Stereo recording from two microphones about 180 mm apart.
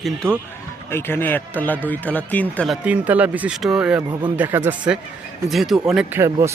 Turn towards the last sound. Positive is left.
turn(degrees=-15)  # may be behind; listen again after turning